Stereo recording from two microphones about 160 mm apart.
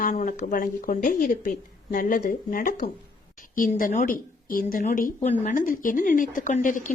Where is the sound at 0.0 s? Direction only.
50° left (ahead or behind).